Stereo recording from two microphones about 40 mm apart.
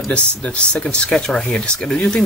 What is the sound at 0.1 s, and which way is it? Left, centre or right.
Speech, left.